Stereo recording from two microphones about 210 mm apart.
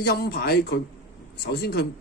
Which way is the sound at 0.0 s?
50° left (ahead or behind).